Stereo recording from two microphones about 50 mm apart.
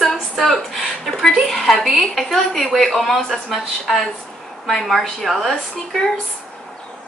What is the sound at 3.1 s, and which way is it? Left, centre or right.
Speech, centre.